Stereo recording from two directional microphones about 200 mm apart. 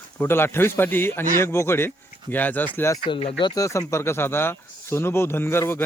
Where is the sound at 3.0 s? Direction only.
25° left (ahead or behind).